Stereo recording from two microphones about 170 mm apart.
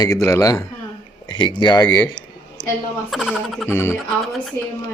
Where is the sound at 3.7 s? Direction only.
15° left (ahead or behind).